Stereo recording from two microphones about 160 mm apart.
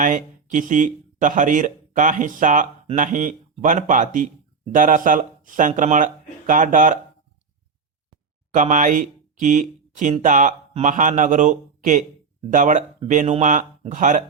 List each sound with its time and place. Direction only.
0.0 s speech: 55° right (ahead or behind)
8.5 s speech: 50° right (ahead or behind)